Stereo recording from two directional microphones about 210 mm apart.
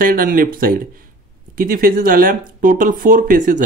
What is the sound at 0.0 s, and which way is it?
Speech, 45° right (ahead or behind).